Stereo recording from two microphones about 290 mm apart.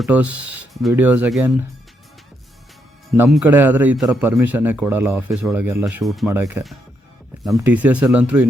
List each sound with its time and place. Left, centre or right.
0.0 s speech: centre
0.3 s speech: right
0.7 s speech: centre
3.2 s a man's voice: centre